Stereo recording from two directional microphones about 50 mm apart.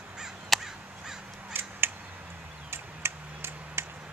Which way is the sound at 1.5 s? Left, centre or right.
Right.